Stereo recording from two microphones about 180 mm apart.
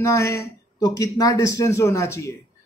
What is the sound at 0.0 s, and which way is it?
A man's voice, 15° left (ahead or behind).